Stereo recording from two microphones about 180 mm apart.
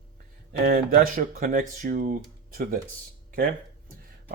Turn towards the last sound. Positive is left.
turn(degrees=-55)  # may be behind; listen again after turning